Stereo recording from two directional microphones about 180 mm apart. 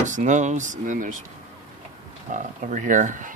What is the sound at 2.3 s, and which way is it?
Speech, 45° right (ahead or behind).